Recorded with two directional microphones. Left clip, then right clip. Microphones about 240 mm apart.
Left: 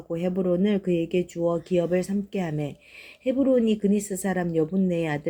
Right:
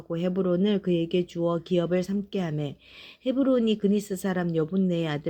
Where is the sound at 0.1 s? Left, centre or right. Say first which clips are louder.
Left 1 dB; right.